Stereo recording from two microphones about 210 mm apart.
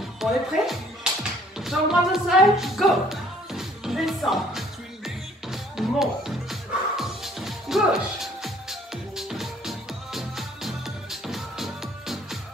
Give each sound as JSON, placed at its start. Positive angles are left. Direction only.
{"t": 0.2, "sound": "speech", "side_deg": 0}
{"t": 1.6, "sound": "music", "side_deg": 0}